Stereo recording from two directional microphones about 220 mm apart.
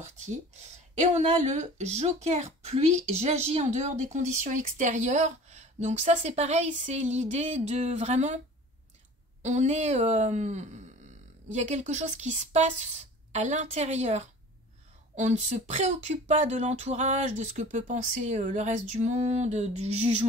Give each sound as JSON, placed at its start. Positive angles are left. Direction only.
{"t": 0.0, "sound": "a woman's voice", "side_deg": -30}
{"t": 9.4, "sound": "a woman's voice", "side_deg": -30}